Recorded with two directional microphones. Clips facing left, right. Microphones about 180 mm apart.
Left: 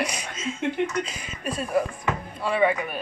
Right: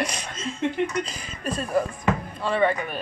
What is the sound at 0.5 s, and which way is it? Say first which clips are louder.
Speech: right 1 dB; 35° right (ahead or behind).